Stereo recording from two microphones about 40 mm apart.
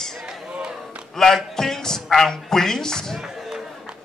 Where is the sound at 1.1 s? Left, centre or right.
Centre.